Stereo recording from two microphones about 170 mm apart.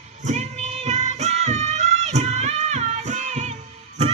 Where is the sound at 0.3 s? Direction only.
40° right (ahead or behind).